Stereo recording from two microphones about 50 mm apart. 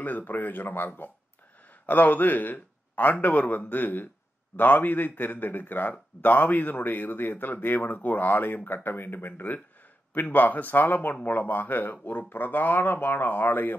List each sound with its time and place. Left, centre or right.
0.0 s speech: left